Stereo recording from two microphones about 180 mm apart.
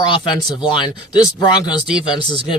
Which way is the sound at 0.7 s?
20° left (ahead or behind).